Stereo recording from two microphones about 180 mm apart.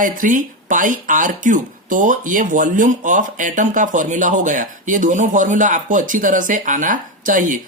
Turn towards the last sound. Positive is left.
turn(degrees=-45)  # may be behind; listen again after turning